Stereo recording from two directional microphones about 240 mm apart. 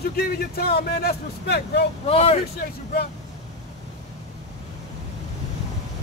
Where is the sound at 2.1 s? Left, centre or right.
Left.